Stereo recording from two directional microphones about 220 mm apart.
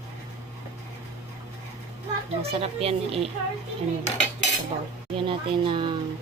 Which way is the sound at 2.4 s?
25° right (ahead or behind).